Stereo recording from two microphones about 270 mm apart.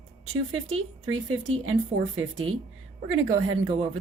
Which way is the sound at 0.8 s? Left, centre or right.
Right.